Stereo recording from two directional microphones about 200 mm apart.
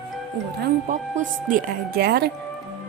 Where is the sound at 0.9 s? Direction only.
40° right (ahead or behind).